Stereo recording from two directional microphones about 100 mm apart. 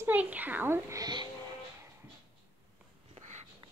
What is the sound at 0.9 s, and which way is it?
Speech, 45° right (ahead or behind).